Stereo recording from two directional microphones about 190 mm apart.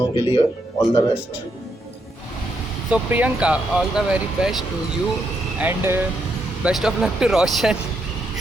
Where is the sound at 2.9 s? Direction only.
10° right (ahead or behind).